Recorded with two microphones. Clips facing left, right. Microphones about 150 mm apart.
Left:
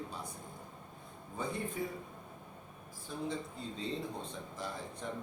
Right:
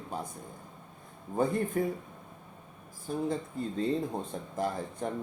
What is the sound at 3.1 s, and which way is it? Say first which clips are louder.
Speech: right 7 dB; 50° right (ahead or behind).